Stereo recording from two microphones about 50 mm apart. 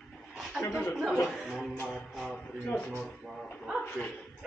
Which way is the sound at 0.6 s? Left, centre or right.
Left.